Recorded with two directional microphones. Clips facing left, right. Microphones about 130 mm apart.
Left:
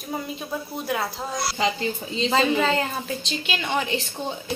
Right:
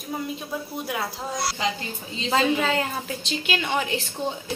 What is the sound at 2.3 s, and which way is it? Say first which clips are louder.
A woman's voice: even; 5° right (ahead or behind).